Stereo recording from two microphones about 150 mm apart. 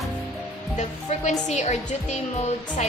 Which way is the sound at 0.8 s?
50° left (ahead or behind).